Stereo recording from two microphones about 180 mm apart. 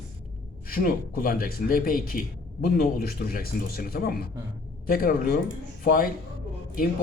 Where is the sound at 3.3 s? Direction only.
50° left (ahead or behind).